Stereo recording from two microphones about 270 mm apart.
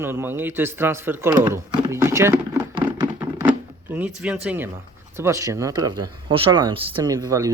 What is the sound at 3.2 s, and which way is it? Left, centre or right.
Drawer open or close, centre.